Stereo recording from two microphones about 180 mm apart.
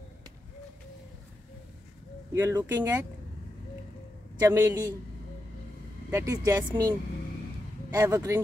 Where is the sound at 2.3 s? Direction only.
15° right (ahead or behind).